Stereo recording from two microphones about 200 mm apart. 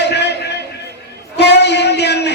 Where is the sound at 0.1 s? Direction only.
55° left (ahead or behind).